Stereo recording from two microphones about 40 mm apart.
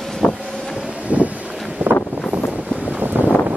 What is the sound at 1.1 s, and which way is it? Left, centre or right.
Boat, right.